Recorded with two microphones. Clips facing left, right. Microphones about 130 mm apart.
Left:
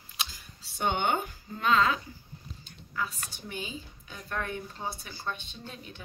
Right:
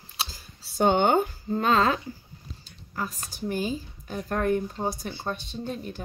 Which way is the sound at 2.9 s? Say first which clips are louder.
Right 2 dB; 40° right (ahead or behind).